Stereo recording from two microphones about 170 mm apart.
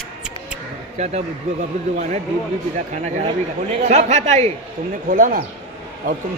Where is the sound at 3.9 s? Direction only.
40° right (ahead or behind).